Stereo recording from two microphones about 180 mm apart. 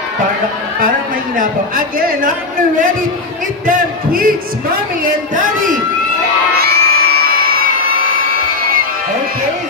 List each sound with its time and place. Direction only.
1.4 s speech: 50° right (ahead or behind)
3.6 s speech: 50° right (ahead or behind)
6.5 s crowd: 60° right (ahead or behind)